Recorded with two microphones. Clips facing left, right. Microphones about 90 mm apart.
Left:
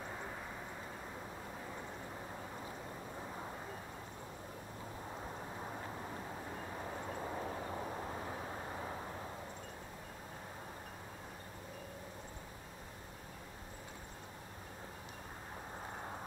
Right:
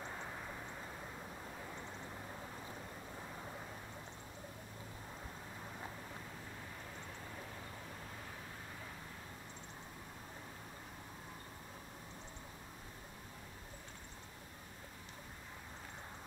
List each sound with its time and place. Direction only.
0.0 s vehicle: 5° left (ahead or behind)
6.7 s vehicle: 35° left (ahead or behind)